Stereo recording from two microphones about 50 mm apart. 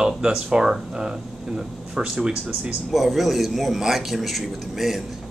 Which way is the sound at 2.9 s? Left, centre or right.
Centre.